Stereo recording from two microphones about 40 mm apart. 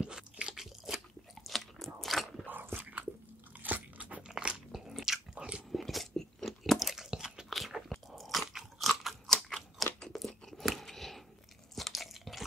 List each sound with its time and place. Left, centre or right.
0.0 s crunch: right
0.6 s crunch: centre
1.4 s biting: centre
2.7 s a sound: right
3.6 s crunch: right
4.3 s biting: right
4.7 s biting: centre
5.3 s biting: right
5.7 s a sound: centre
6.4 s crunch: centre
7.1 s biting: centre
7.4 s biting: centre
8.1 s crunch: centre